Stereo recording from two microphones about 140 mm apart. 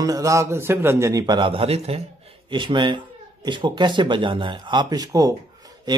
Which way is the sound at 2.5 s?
35° right (ahead or behind).